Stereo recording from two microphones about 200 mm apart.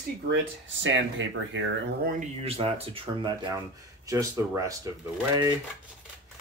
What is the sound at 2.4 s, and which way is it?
Speech, 30° right (ahead or behind).